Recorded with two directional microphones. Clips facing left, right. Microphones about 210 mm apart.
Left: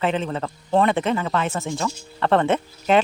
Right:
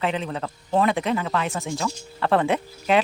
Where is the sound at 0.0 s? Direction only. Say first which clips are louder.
Left 3 dB; centre (ahead or behind).